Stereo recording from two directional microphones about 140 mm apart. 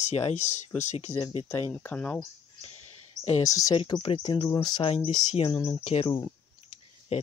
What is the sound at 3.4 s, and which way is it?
Speech, 25° left (ahead or behind).